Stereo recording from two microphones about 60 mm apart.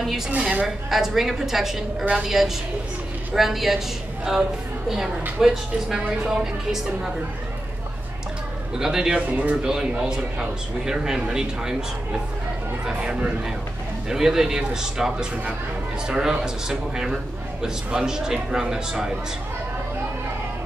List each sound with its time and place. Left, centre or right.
0.3 s speech: right
0.8 s a woman's voice: centre
8.7 s a man's voice: centre
9.2 s speech: right
9.6 s a man's voice: centre
12.8 s a man's voice: centre